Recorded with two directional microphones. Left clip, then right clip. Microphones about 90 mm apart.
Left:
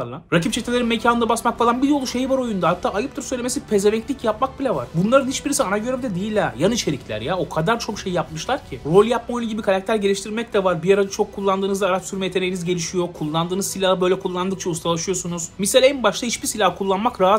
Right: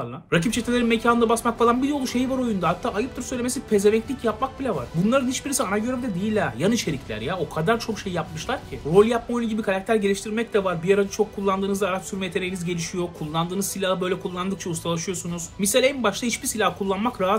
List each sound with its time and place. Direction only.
0.3 s speech: 30° left (ahead or behind)